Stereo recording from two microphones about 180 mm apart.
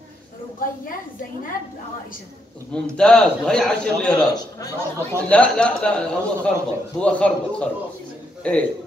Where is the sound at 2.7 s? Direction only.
5° left (ahead or behind).